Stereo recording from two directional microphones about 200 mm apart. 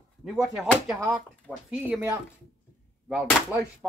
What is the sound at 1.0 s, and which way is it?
Speech, 15° right (ahead or behind).